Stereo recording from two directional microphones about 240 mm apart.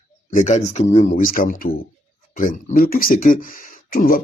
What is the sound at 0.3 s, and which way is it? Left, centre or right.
Speech, left.